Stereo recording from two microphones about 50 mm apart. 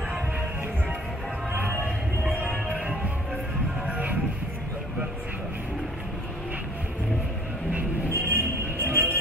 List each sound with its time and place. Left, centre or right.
1.5 s music: right
3.8 s music: right
8.1 s music: right